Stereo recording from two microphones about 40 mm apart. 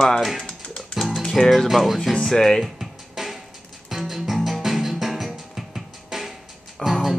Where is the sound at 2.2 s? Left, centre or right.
Centre.